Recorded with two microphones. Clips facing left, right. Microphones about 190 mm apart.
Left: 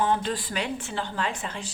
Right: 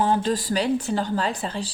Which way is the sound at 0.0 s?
35° right (ahead or behind).